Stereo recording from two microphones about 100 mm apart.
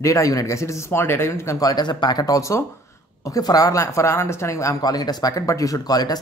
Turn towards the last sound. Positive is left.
turn(degrees=40)  # may be behind; listen again after turning